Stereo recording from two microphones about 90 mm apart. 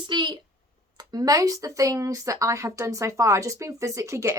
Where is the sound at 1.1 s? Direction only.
40° right (ahead or behind).